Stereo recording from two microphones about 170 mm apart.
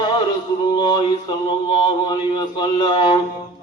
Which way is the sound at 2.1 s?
25° left (ahead or behind).